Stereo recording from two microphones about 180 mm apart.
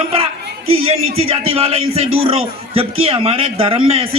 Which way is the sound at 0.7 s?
35° right (ahead or behind).